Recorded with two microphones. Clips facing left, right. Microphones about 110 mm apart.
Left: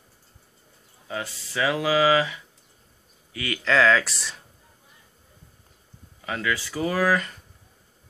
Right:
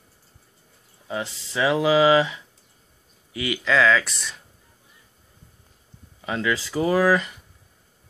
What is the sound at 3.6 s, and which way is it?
Speech, centre (ahead or behind).